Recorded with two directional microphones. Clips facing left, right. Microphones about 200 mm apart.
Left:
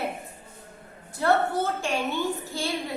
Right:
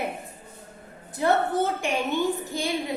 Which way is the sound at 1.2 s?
15° right (ahead or behind).